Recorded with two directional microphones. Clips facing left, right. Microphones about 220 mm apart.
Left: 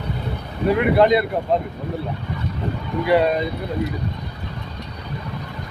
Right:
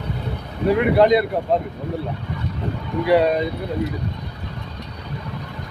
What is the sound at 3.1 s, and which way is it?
Speech, 35° right (ahead or behind).